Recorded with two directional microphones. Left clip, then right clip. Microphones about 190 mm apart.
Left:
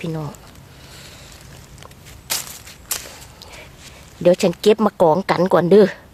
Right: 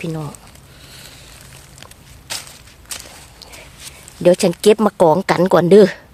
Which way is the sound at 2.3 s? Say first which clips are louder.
Left 2 dB; 35° left (ahead or behind).